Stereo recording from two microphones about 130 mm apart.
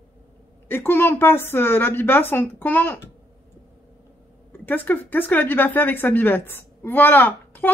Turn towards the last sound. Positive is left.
turn(degrees=15)  # may be behind; listen again after turning